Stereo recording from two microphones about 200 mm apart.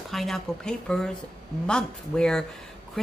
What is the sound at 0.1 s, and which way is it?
Speech, centre (ahead or behind).